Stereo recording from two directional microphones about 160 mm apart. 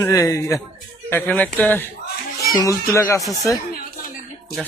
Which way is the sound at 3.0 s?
20° left (ahead or behind).